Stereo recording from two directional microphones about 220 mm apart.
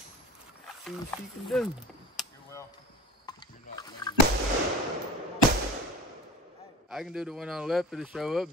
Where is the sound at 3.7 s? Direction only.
20° left (ahead or behind).